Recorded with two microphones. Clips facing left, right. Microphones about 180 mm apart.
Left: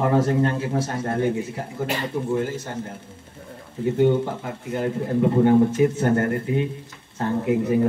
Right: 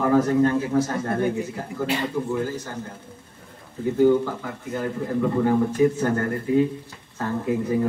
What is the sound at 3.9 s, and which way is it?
A man's voice, 25° left (ahead or behind).